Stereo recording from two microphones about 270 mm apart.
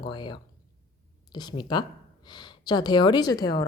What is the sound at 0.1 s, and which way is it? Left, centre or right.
Speech, centre.